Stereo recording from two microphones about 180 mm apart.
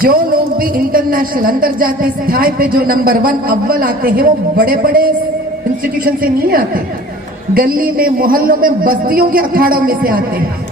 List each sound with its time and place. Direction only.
0.0 s a man's voice: 55° right (ahead or behind)